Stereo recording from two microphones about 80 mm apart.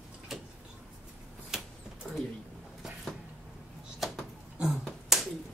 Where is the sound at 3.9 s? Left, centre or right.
Centre.